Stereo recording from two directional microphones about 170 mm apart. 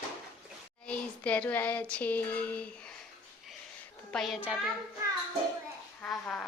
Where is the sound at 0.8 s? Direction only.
5° left (ahead or behind).